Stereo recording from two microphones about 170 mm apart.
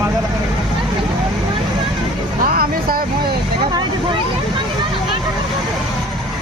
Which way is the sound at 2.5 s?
60° right (ahead or behind).